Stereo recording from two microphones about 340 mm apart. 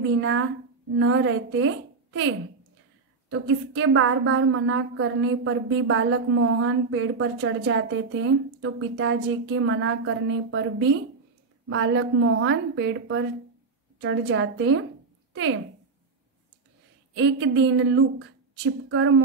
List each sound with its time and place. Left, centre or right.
0.2 s a woman's voice: right
17.2 s a woman's voice: right